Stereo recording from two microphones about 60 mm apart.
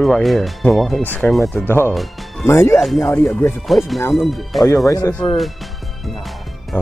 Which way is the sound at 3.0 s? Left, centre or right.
Left.